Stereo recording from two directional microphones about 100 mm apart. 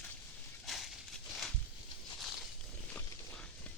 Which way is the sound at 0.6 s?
Centre (ahead or behind).